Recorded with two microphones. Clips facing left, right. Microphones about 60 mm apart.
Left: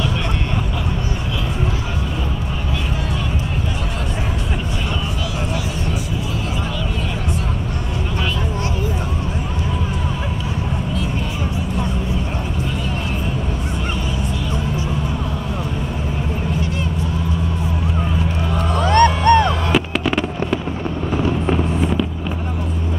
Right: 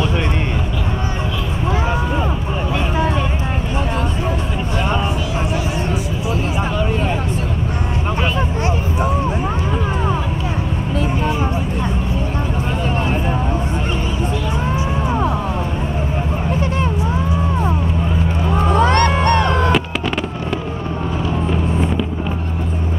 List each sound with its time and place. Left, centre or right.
18.5 s music: right